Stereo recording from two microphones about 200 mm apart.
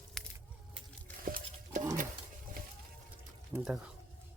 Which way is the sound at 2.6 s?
45° right (ahead or behind).